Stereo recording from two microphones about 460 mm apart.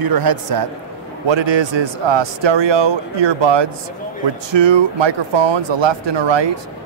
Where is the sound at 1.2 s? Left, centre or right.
Right.